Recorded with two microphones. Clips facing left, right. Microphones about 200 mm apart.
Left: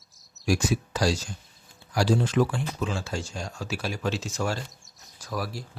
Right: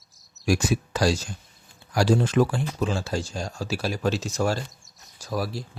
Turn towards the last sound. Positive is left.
turn(degrees=-25)  # may be behind; listen again after turning